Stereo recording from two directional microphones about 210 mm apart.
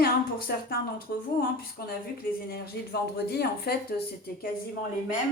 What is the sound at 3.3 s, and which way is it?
Speech, 50° left (ahead or behind).